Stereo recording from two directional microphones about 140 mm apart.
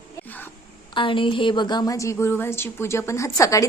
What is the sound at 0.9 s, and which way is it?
A woman's voice, 35° left (ahead or behind).